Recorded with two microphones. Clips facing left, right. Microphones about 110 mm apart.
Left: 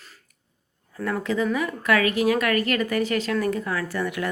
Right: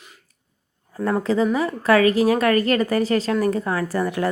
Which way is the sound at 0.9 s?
35° right (ahead or behind).